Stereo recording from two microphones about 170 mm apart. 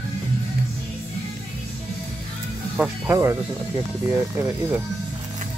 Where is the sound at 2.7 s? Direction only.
10° right (ahead or behind).